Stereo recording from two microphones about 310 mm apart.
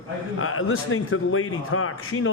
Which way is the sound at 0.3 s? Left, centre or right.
Left.